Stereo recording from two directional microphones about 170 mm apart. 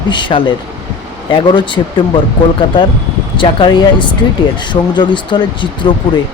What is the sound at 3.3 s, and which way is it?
Speech, 30° left (ahead or behind).